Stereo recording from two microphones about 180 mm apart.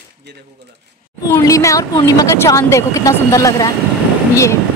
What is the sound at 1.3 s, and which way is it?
Speech, 15° left (ahead or behind).